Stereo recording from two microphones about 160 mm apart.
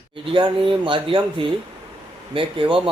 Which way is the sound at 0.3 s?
30° right (ahead or behind).